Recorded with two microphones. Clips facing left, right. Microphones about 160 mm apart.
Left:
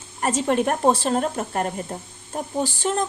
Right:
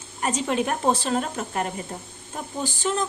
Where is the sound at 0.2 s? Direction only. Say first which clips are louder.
Left 3 dB; 50° left (ahead or behind).